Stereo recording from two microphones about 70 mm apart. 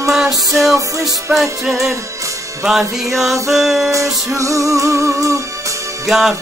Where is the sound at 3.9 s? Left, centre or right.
Right.